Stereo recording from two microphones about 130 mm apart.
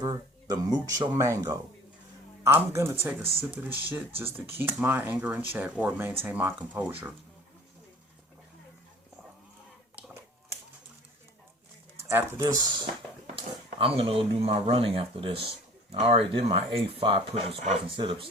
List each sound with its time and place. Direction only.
0.0 s speech: 30° right (ahead or behind); by 6.9 s 10° right (ahead or behind)
9.9 s a sound: 20° right (ahead or behind)
12.0 s speech: 20° right (ahead or behind)
13.7 s speech: 45° right (ahead or behind)
17.9 s speech: 40° right (ahead or behind)